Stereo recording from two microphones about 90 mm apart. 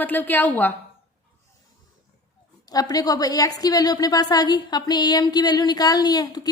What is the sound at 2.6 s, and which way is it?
A woman's voice, 45° left (ahead or behind).